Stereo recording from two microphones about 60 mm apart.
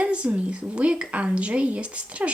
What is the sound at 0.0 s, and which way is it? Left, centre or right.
A woman's voice, right.